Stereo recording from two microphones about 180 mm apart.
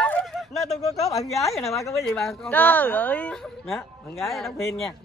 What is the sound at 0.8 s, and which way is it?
Speech, 20° left (ahead or behind).